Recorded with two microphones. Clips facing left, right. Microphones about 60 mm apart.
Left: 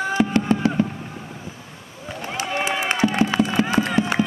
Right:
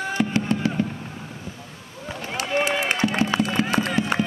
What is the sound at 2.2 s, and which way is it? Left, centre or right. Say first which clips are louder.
Run: left 2 dB; centre.